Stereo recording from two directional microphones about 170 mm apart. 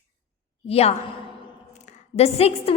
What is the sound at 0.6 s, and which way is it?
A woman's voice, 35° left (ahead or behind).